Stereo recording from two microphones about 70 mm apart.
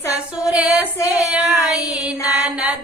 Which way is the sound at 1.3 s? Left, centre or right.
Centre.